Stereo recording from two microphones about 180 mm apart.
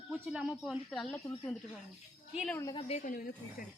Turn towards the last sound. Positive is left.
turn(degrees=50)  # may be behind; listen again after turning